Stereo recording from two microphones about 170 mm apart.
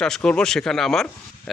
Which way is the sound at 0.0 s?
5° left (ahead or behind).